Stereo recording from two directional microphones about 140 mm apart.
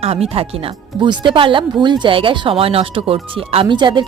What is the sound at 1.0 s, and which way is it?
Speech, 35° right (ahead or behind).